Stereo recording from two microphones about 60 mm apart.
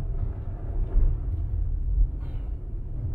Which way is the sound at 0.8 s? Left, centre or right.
Centre.